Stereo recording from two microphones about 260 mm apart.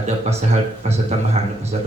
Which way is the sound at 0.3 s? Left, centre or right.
Right.